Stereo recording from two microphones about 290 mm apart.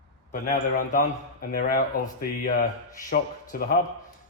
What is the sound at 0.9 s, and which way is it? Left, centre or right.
Speech, left.